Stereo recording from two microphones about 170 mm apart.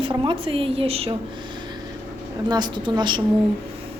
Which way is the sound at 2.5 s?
25° right (ahead or behind).